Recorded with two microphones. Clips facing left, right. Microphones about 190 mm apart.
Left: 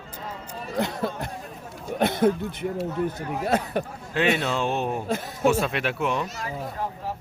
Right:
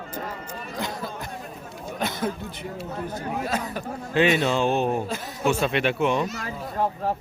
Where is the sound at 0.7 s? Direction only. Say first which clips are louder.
Left 6 dB; 60° left (ahead or behind).